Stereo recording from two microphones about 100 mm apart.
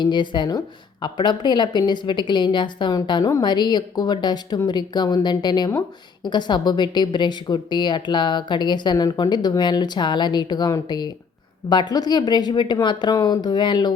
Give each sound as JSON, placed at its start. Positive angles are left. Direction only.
{"t": 0.0, "sound": "a woman's voice", "side_deg": 50}